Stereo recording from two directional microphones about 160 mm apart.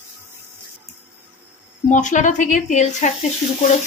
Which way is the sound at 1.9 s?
50° left (ahead or behind).